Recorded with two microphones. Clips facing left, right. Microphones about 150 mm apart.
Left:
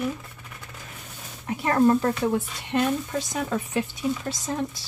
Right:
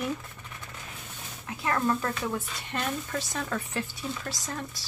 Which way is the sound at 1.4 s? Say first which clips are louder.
Left 8 dB; 25° left (ahead or behind).